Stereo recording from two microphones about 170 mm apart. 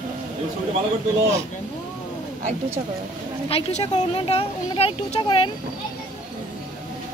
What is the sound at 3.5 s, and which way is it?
Speech, 35° left (ahead or behind).